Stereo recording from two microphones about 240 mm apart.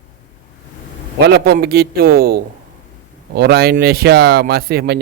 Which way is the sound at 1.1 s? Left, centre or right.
Right.